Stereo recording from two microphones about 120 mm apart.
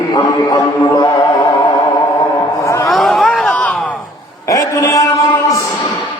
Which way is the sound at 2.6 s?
25° left (ahead or behind).